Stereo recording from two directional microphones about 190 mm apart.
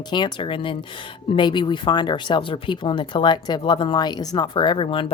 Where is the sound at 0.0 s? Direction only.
25° left (ahead or behind).